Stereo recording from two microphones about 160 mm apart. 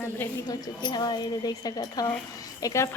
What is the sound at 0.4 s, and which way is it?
A woman's voice, 30° left (ahead or behind).